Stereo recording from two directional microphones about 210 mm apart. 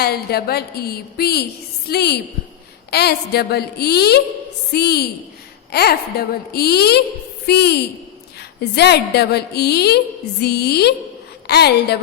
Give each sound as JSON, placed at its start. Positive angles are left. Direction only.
{"t": 0.0, "sound": "speech", "side_deg": 50}